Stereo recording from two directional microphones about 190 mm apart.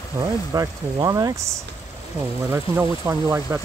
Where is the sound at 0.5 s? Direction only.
20° right (ahead or behind).